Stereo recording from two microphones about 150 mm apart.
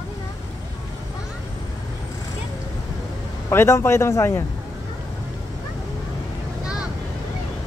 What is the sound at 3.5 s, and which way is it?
Speech, 15° left (ahead or behind).